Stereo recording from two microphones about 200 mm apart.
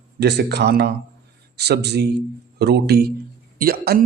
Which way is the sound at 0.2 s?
55° right (ahead or behind).